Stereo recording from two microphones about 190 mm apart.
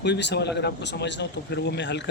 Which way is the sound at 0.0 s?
65° left (ahead or behind).